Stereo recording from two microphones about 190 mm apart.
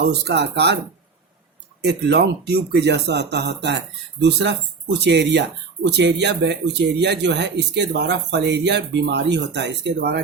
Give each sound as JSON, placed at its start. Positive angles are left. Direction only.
{"t": 0.0, "sound": "speech", "side_deg": -60}
{"t": 1.8, "sound": "speech", "side_deg": -60}